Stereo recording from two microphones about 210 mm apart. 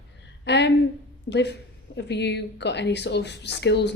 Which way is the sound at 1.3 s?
55° left (ahead or behind).